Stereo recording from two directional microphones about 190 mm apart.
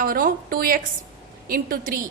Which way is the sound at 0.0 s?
45° right (ahead or behind).